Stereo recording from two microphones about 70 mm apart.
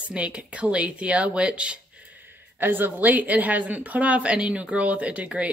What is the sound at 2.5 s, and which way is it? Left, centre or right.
Speech, right.